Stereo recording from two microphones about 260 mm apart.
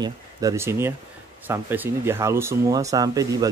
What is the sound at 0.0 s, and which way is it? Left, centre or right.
A man's voice, centre.